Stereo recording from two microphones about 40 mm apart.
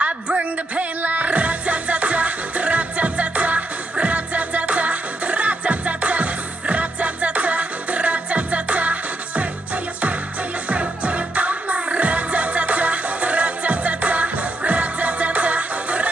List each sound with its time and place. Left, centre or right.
0.0 s music: right
10.7 s music: right